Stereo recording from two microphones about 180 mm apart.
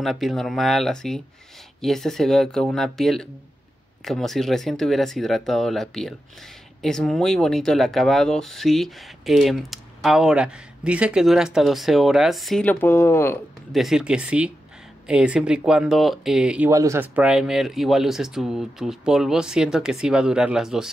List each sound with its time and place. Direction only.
0.0 s speech: centre (ahead or behind)
13.7 s speech: centre (ahead or behind)